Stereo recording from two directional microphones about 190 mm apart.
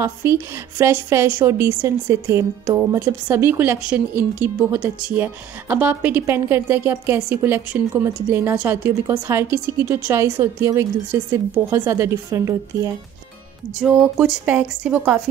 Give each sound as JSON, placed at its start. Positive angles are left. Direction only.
{"t": 0.0, "sound": "speech", "side_deg": -15}
{"t": 13.7, "sound": "a woman's voice", "side_deg": -5}